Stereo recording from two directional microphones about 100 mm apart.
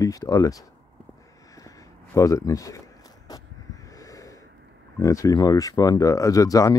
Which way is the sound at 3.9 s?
35° left (ahead or behind).